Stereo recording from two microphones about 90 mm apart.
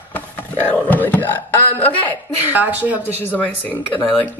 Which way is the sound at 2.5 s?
20° right (ahead or behind).